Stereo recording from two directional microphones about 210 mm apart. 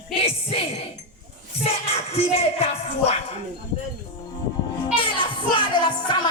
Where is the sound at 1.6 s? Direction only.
30° left (ahead or behind).